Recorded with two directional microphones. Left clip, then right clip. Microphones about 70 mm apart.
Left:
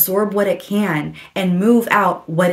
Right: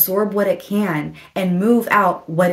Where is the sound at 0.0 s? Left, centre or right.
Left.